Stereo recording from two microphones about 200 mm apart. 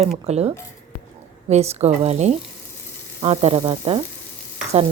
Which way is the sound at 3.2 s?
30° right (ahead or behind).